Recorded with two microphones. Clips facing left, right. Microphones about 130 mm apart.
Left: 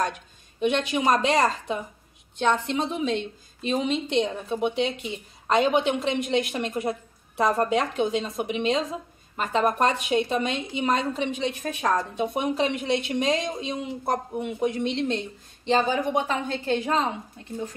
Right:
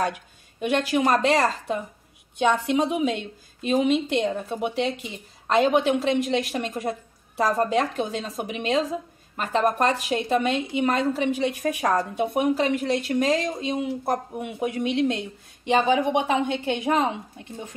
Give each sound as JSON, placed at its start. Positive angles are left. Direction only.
{"t": 0.0, "sound": "a woman's voice", "side_deg": -5}
{"t": 2.3, "sound": "a woman's voice", "side_deg": -10}